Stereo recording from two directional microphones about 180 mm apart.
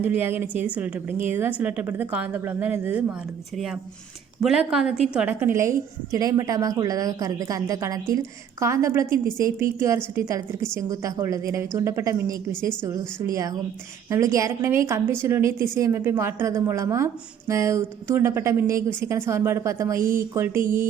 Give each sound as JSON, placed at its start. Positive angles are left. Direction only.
{"t": 0.0, "sound": "a woman's voice", "side_deg": -10}
{"t": 4.4, "sound": "a woman's voice", "side_deg": -5}